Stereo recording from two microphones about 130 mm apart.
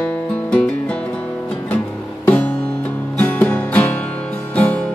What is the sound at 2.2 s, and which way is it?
Music, 10° left (ahead or behind).